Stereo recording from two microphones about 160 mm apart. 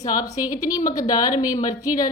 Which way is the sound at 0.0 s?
20° left (ahead or behind).